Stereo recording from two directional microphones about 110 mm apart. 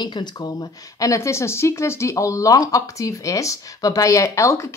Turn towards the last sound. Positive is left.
turn(degrees=25)  # may be behind; listen again after turning